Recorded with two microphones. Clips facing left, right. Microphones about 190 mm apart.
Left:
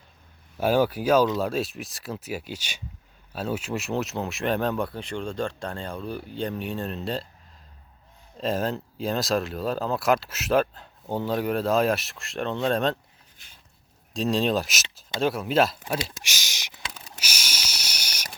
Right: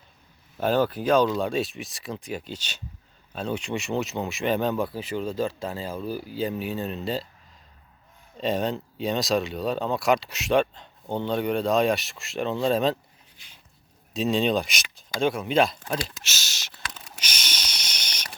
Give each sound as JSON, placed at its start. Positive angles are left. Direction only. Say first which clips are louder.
{"t": 0.6, "sound": "speech", "louder": "left 1 dB", "side_deg": 10}
{"t": 8.4, "sound": "speech", "louder": "right 1 dB", "side_deg": 0}
{"t": 14.1, "sound": "speech", "louder": "right 1 dB", "side_deg": 0}
{"t": 16.0, "sound": "speech", "louder": "left 1 dB", "side_deg": 15}
{"t": 17.0, "sound": "a sound", "louder": "even", "side_deg": 5}